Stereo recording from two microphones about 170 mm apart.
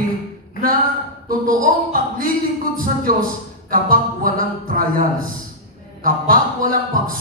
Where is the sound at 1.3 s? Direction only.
55° right (ahead or behind).